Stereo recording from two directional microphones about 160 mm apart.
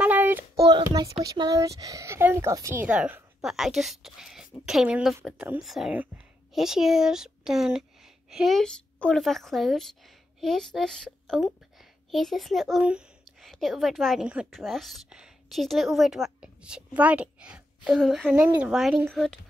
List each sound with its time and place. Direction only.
0.0 s child singing: 10° right (ahead or behind)
0.7 s a woman's voice: 25° right (ahead or behind); by 19.4 s centre (ahead or behind)